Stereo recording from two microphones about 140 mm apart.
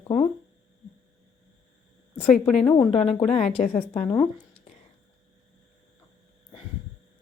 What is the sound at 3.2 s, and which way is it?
Speech, 45° left (ahead or behind).